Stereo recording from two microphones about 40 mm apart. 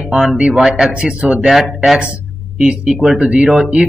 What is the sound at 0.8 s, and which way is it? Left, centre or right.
Speech, right.